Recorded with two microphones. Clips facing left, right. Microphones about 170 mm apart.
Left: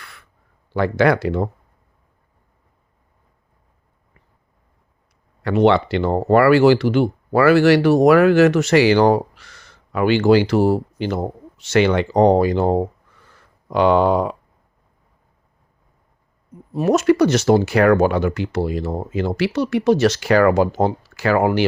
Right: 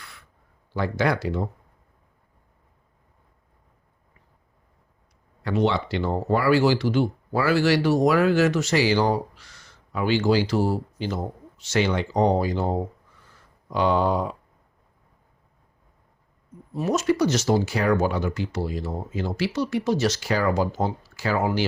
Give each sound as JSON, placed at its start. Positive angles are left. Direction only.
{"t": 0.0, "sound": "a sound", "side_deg": 65}
{"t": 0.7, "sound": "speech", "side_deg": 65}
{"t": 5.4, "sound": "speech", "side_deg": 65}
{"t": 16.7, "sound": "speech", "side_deg": 65}